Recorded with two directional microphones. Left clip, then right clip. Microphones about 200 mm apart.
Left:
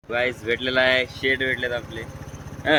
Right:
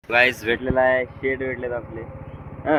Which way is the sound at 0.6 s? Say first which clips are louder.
Even; 15° left (ahead or behind).